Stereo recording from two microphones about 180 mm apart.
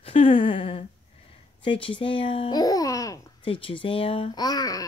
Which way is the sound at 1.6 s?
30° left (ahead or behind).